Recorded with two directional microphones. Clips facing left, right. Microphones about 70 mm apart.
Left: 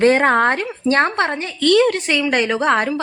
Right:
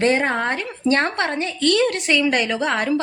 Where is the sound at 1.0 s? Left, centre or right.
Left.